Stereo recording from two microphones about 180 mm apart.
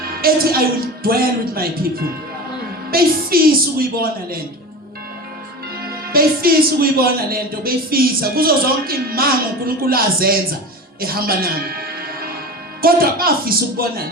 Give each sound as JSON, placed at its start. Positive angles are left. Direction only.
{"t": 0.2, "sound": "a man's voice", "side_deg": -55}
{"t": 2.9, "sound": "a man's voice", "side_deg": -55}
{"t": 5.9, "sound": "a man's voice", "side_deg": -55}